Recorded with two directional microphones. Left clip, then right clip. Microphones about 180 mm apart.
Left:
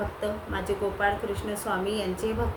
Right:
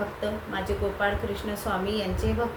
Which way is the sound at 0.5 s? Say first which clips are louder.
Even; 20° left (ahead or behind).